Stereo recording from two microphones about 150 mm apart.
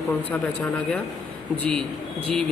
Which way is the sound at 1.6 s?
5° left (ahead or behind).